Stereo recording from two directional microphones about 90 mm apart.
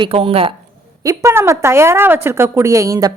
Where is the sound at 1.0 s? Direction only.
30° right (ahead or behind).